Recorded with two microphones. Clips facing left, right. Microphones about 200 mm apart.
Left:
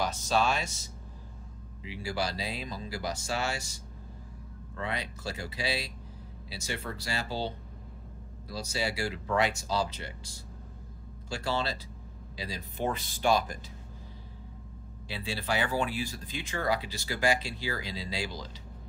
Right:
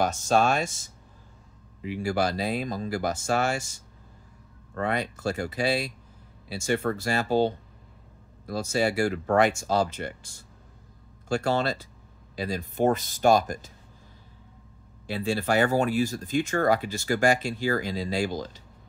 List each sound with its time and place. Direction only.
0.0 s speech: 50° right (ahead or behind)
15.0 s speech: 50° right (ahead or behind)